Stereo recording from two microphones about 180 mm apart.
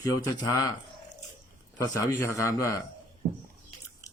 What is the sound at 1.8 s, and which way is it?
Speech, 15° left (ahead or behind).